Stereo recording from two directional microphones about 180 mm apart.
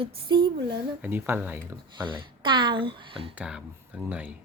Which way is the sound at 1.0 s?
10° right (ahead or behind).